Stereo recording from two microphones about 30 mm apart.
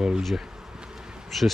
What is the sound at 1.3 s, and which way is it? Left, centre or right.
Insect, centre.